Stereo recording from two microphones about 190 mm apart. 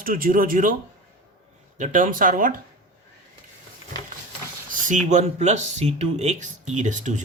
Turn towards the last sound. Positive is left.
turn(degrees=-40)  # may be behind; listen again after turning